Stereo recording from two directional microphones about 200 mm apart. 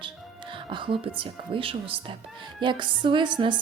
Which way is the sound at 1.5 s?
25° right (ahead or behind).